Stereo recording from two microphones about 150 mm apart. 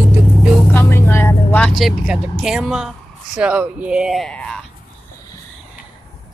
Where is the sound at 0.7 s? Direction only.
15° left (ahead or behind).